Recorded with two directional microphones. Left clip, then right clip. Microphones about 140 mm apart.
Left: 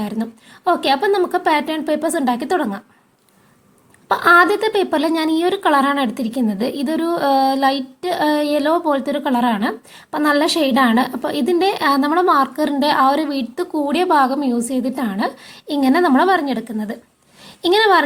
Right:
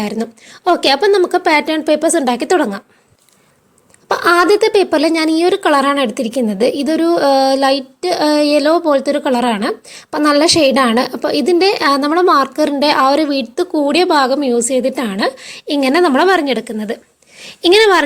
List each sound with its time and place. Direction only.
0.0 s speech: 45° right (ahead or behind)
4.1 s a woman's voice: 40° right (ahead or behind)